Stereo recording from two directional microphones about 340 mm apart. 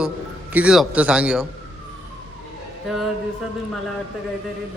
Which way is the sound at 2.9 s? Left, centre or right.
Centre.